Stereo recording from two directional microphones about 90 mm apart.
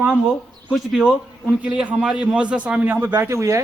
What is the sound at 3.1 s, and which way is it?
Speech, 35° right (ahead or behind).